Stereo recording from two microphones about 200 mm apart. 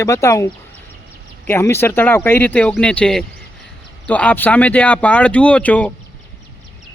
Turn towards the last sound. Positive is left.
turn(degrees=10)  # may be behind; listen again after turning